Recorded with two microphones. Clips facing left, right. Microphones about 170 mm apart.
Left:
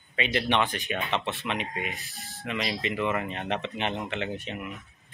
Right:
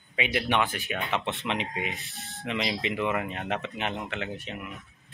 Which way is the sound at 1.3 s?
20° right (ahead or behind).